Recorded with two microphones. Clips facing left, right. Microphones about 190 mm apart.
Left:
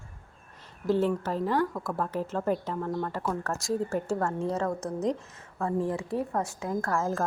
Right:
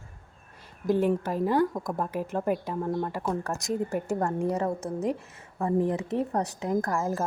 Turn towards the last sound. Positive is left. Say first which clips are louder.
# right 1 dB
turn(degrees=-10)  # may be behind; listen again after turning